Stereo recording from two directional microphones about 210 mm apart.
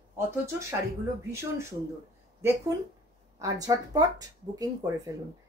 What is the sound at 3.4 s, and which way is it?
Speech, 15° right (ahead or behind).